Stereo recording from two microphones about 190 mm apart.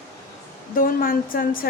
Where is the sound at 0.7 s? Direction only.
50° left (ahead or behind).